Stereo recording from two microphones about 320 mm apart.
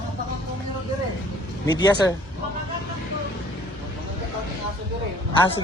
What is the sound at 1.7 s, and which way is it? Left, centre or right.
Speech, centre.